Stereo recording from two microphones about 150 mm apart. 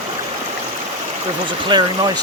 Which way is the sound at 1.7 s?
30° right (ahead or behind).